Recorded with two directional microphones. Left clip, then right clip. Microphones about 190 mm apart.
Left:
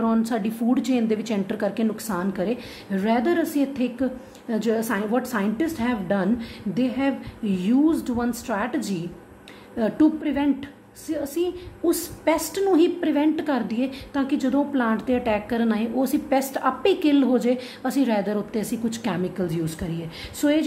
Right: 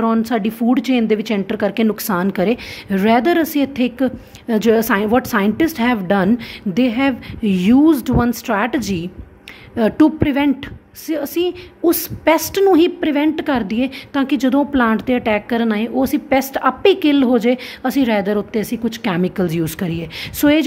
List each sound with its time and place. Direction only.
0.0 s a woman's voice: 30° right (ahead or behind)